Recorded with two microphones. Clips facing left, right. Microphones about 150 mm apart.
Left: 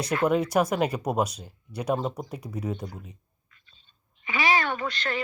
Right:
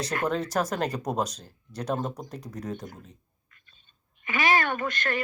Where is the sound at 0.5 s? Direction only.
10° left (ahead or behind).